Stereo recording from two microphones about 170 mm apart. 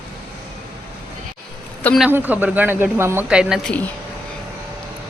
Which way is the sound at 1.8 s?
5° left (ahead or behind).